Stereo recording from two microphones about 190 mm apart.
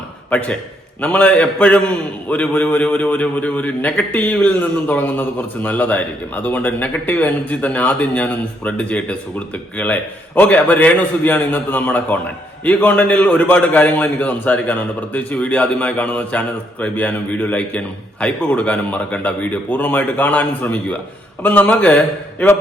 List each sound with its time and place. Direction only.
0.3 s a man's voice: 5° left (ahead or behind)